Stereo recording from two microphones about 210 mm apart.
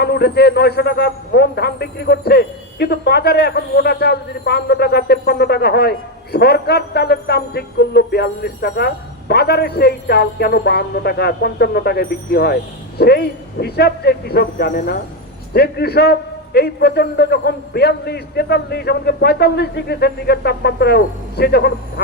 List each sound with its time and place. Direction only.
0.0 s a man's voice: 50° left (ahead or behind)